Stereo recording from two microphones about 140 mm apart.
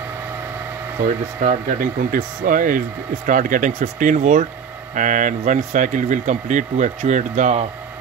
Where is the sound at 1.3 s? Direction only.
65° right (ahead or behind).